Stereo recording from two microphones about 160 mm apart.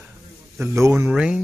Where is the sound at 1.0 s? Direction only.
5° right (ahead or behind).